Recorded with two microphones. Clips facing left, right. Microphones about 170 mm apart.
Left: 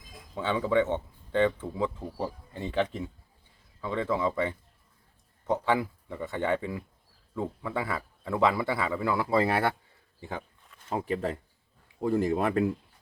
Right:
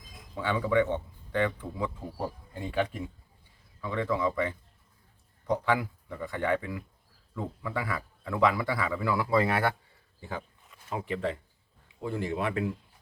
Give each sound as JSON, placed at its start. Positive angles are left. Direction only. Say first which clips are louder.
{"t": 0.3, "sound": "speech", "louder": "left 1 dB", "side_deg": 25}
{"t": 2.1, "sound": "speech", "louder": "left 1 dB", "side_deg": -10}
{"t": 3.8, "sound": "speech", "louder": "left 1 dB", "side_deg": 25}
{"t": 10.8, "sound": "speech", "louder": "left 2 dB", "side_deg": 40}